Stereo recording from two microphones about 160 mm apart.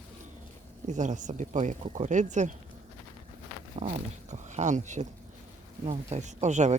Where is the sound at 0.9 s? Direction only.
50° right (ahead or behind).